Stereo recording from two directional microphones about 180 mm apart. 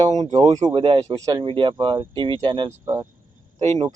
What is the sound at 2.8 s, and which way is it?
Speech, 15° right (ahead or behind).